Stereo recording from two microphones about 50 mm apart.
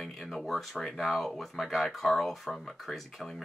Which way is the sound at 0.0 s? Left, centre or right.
Centre.